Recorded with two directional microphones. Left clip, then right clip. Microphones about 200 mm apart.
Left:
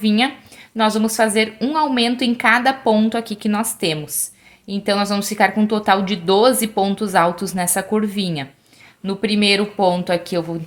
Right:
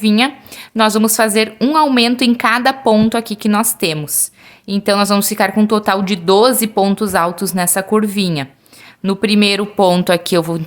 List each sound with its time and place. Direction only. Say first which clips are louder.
0.0 s speech: right 4 dB; 20° right (ahead or behind); by 10.6 s 35° right (ahead or behind)